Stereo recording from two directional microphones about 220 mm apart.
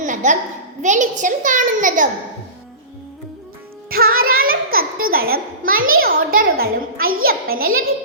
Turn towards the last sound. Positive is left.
turn(degrees=-40)  # may be behind; listen again after turning